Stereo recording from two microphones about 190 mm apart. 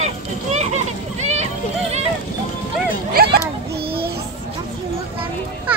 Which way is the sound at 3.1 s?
55° right (ahead or behind).